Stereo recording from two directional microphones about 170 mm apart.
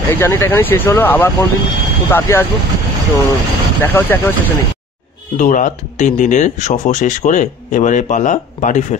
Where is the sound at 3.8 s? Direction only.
10° left (ahead or behind).